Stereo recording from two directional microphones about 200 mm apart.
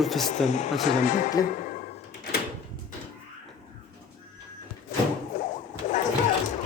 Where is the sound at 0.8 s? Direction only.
40° left (ahead or behind).